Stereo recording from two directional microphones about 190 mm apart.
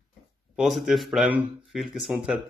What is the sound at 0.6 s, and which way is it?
Speech, centre (ahead or behind).